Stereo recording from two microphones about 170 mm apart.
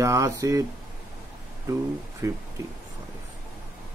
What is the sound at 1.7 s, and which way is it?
Speech, 20° right (ahead or behind).